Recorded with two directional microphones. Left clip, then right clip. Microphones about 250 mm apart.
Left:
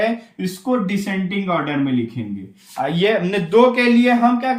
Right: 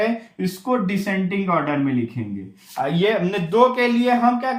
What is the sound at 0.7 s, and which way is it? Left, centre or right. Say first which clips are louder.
Speech: left 1 dB; centre.